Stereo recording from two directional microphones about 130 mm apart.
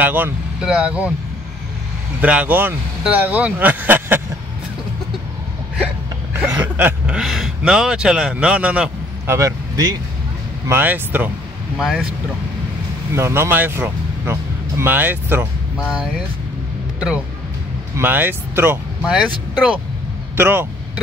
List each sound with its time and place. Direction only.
0.0 s speech: 15° right (ahead or behind)
2.2 s speech: 10° right (ahead or behind)
6.3 s speech: 15° right (ahead or behind)
9.3 s speech: 25° right (ahead or behind); by 12.1 s 5° right (ahead or behind)
13.1 s speech: 20° right (ahead or behind)
17.9 s speech: 15° right (ahead or behind)
19.0 s speech: 5° right (ahead or behind)
20.3 s speech: 15° right (ahead or behind)